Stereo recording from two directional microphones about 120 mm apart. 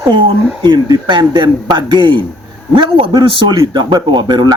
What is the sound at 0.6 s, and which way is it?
A man's voice, 35° right (ahead or behind).